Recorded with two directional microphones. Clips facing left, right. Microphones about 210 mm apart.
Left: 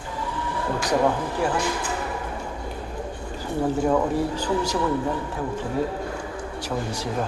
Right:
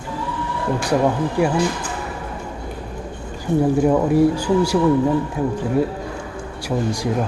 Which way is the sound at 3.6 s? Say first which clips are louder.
Right 4 dB; 15° right (ahead or behind).